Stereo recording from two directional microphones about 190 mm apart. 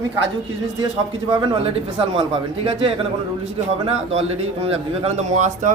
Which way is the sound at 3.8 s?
30° right (ahead or behind).